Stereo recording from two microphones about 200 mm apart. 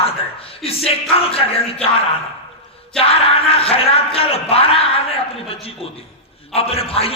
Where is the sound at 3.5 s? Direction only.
30° left (ahead or behind).